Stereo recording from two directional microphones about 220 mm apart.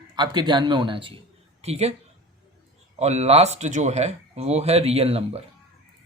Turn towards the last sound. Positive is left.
turn(degrees=-25)  # may be behind; listen again after turning